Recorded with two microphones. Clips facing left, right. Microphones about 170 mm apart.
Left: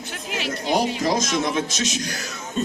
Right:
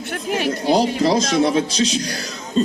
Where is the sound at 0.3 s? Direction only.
45° right (ahead or behind).